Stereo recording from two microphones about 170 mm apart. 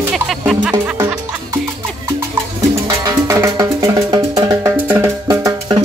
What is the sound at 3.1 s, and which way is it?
Music, 20° right (ahead or behind).